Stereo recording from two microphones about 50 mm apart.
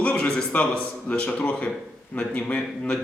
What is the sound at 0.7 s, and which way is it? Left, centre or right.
Speech, left.